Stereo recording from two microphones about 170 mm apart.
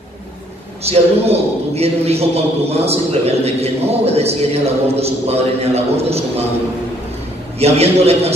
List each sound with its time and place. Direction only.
0.8 s a man's voice: 35° right (ahead or behind)
7.5 s a man's voice: 40° right (ahead or behind)